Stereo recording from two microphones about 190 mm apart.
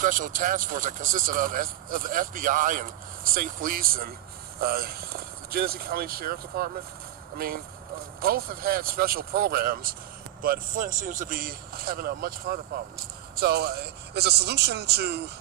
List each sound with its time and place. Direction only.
0.0 s a man's voice: 45° right (ahead or behind); by 15.3 s 60° right (ahead or behind)